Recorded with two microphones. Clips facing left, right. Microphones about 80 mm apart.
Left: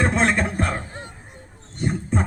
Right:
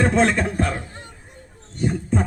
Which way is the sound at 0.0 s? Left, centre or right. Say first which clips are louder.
Right 3 dB; left.